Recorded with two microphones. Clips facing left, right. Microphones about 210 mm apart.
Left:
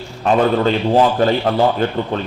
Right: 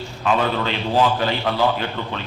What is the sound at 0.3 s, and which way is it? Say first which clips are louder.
A man's voice: left 7 dB; 40° left (ahead or behind).